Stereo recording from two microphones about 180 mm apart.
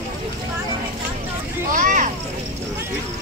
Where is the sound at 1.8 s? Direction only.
45° right (ahead or behind).